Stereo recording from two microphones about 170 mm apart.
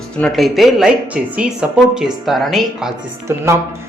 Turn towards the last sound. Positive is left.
turn(degrees=-15)  # may be behind; listen again after turning